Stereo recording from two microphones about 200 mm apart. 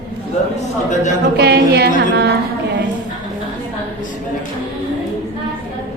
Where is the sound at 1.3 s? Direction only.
55° right (ahead or behind).